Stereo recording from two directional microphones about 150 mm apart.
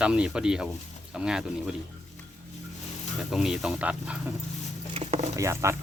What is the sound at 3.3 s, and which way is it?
Speech, 5° right (ahead or behind).